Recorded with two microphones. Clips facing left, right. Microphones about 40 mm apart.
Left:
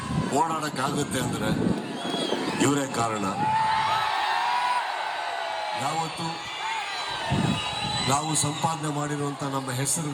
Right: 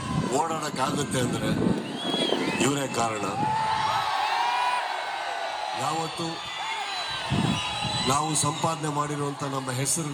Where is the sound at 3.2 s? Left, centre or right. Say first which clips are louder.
Left 2 dB; left.